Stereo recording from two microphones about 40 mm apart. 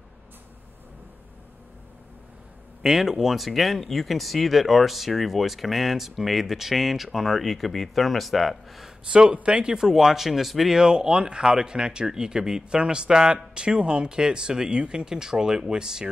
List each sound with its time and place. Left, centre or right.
2.8 s speech: centre
9.1 s speech: right
9.8 s speech: centre
10.8 s speech: centre